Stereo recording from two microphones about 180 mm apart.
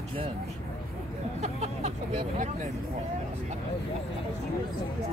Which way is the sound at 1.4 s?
35° right (ahead or behind).